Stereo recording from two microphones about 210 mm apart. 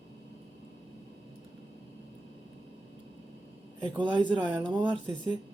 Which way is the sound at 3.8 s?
20° right (ahead or behind).